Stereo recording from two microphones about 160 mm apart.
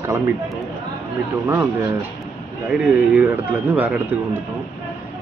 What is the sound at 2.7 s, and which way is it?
Speech, 5° right (ahead or behind).